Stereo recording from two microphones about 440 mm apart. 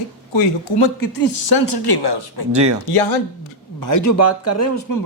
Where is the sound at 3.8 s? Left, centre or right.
Left.